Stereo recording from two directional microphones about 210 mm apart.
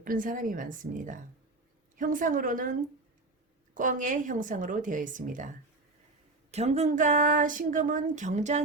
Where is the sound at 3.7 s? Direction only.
40° right (ahead or behind).